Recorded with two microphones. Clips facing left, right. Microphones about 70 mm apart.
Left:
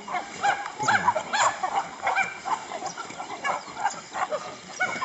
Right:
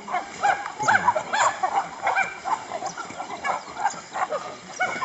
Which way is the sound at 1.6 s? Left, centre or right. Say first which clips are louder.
Right 3 dB; centre.